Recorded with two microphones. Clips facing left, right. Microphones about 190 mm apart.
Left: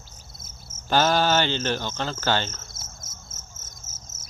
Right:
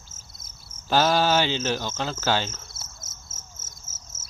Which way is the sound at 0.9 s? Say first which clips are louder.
Even; 5° right (ahead or behind).